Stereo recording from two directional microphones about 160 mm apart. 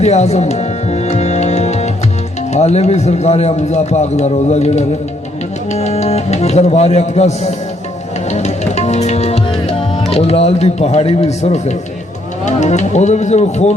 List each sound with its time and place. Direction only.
0.0 s music: 45° left (ahead or behind)
2.5 s speech: 45° left (ahead or behind)
8.3 s music: 45° left (ahead or behind)
12.5 s speech: 45° left (ahead or behind)